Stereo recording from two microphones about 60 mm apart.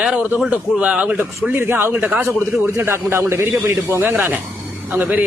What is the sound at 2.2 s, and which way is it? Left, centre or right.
A man's voice, right.